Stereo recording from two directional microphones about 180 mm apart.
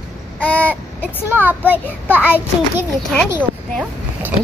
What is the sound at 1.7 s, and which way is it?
Speech, 10° left (ahead or behind).